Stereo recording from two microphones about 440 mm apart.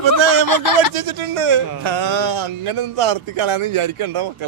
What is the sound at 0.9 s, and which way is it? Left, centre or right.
Speech, right.